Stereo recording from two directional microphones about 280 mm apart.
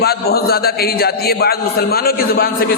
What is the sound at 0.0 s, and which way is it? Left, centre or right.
A man's voice, left.